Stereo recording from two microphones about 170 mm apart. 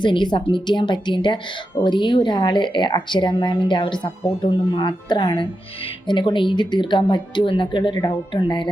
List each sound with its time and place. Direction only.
0.0 s speech: 25° left (ahead or behind)